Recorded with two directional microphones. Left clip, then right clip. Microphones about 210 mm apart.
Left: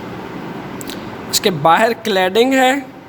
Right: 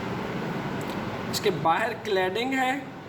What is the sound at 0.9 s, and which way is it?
Speech, 55° left (ahead or behind).